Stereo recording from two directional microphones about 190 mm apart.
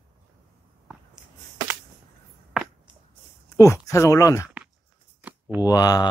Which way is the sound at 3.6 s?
15° left (ahead or behind).